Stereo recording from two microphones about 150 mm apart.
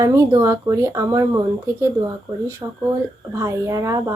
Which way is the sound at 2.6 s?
30° right (ahead or behind).